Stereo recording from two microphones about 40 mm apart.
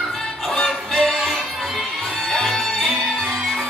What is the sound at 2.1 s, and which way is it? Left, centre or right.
Music, centre.